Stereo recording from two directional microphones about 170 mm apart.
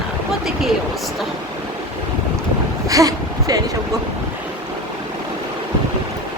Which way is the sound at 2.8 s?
20° right (ahead or behind).